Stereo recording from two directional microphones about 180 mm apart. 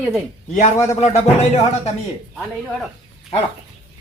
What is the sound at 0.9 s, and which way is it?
Speech, 40° left (ahead or behind).